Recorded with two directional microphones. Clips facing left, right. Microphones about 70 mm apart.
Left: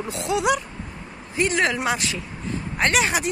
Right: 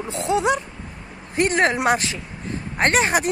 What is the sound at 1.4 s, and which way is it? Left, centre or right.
Speech, right.